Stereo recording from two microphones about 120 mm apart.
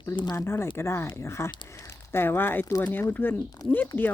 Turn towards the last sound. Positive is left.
turn(degrees=15)  # may be behind; listen again after turning